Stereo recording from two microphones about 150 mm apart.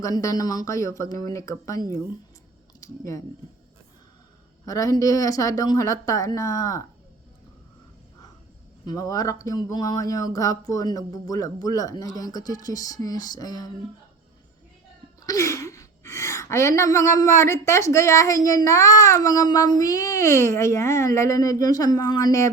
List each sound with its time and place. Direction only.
0.0 s a woman's voice: 20° left (ahead or behind)
2.8 s a woman's voice: 20° left (ahead or behind)
4.6 s a woman's voice: 25° left (ahead or behind)
8.9 s a woman's voice: 25° left (ahead or behind)
15.3 s a woman's voice: 20° left (ahead or behind)